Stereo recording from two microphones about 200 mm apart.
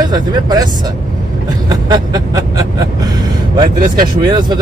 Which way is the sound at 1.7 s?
20° right (ahead or behind).